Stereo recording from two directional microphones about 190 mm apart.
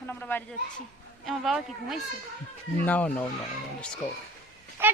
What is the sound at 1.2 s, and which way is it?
Speech, centre (ahead or behind).